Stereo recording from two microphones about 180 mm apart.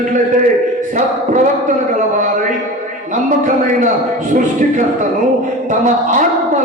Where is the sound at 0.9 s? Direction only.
45° right (ahead or behind).